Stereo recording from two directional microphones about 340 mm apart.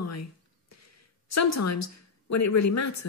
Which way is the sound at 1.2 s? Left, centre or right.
Left.